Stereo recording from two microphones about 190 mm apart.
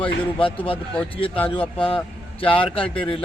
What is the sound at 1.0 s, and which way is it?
Speech, 30° left (ahead or behind).